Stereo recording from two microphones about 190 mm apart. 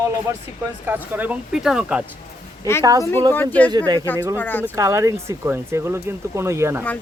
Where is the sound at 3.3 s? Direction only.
10° left (ahead or behind).